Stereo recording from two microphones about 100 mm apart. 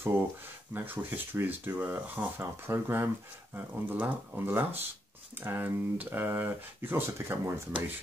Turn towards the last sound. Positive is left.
turn(degrees=-25)  # may be behind; listen again after turning